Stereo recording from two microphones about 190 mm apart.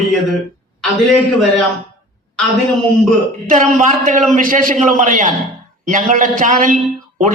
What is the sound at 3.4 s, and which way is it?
A man's voice, 45° right (ahead or behind).